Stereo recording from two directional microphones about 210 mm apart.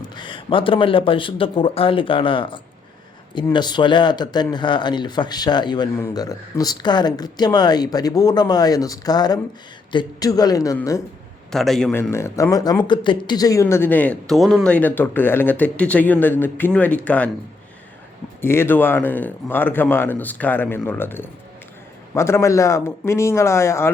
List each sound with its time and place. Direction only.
0.2 s speech: 25° left (ahead or behind)
11.5 s speech: centre (ahead or behind)
18.4 s speech: 10° left (ahead or behind)